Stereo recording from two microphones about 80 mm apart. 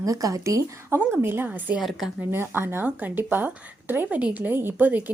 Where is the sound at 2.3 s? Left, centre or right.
Right.